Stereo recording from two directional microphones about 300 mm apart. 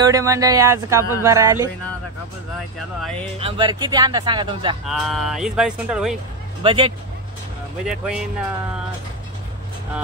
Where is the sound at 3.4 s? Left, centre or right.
Centre.